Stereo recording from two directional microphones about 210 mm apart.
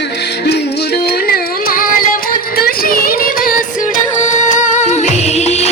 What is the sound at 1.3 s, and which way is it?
Carnatic music, 40° left (ahead or behind).